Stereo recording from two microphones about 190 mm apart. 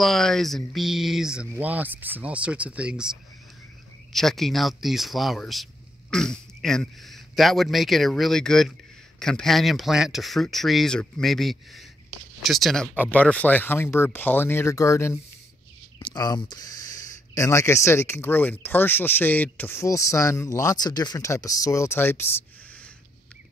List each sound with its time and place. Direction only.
0.0 s a man's voice: centre (ahead or behind)